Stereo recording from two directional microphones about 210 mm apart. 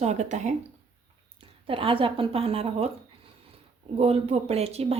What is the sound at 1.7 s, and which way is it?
Speech, 25° right (ahead or behind).